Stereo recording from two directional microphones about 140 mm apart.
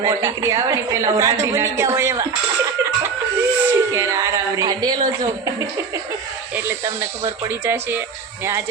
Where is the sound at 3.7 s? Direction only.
20° right (ahead or behind).